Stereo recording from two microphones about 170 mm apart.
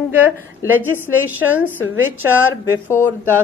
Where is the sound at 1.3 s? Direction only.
10° right (ahead or behind).